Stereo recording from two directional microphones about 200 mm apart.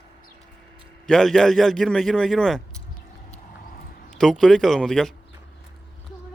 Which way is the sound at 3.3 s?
35° left (ahead or behind).